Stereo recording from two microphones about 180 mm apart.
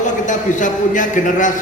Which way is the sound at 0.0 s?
45° left (ahead or behind).